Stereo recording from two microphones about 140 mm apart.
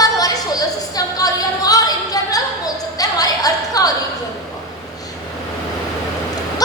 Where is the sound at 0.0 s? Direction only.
25° left (ahead or behind).